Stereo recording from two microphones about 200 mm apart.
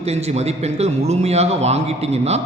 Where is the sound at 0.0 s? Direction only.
30° right (ahead or behind).